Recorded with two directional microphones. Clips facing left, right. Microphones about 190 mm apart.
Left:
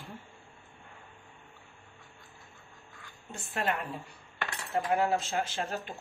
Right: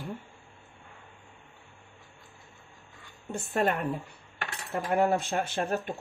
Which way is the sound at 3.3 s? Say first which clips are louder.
Right 5 dB; 55° right (ahead or behind).